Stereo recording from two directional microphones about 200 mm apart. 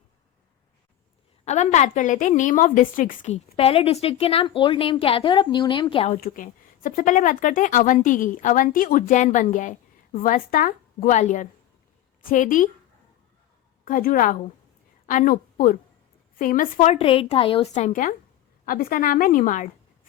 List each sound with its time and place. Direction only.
1.5 s speech: 35° left (ahead or behind)
6.1 s speech: 45° left (ahead or behind)
13.8 s a woman's voice: 45° left (ahead or behind)